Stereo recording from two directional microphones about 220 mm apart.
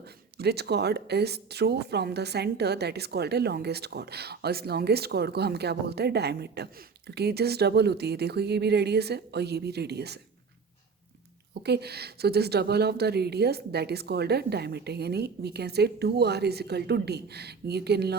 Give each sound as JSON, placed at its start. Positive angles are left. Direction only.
{"t": 0.3, "sound": "speech", "side_deg": -45}
{"t": 11.6, "sound": "speech", "side_deg": -50}